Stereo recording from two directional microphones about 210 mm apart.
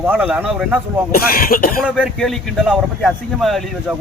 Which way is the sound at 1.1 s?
45° left (ahead or behind).